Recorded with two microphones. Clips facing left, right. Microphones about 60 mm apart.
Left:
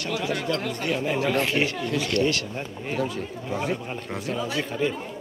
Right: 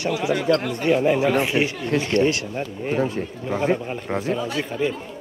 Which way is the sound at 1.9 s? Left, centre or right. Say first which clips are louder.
Right 4 dB; right.